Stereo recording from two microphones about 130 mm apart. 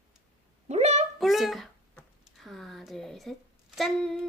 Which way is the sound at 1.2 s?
Centre (ahead or behind).